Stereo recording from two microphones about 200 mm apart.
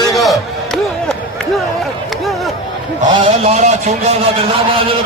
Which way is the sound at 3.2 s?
30° right (ahead or behind).